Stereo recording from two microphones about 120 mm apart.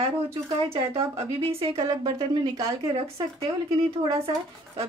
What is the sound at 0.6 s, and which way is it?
A woman's voice, 55° right (ahead or behind).